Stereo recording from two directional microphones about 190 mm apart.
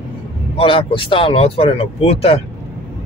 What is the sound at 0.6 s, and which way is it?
Speech, 30° left (ahead or behind).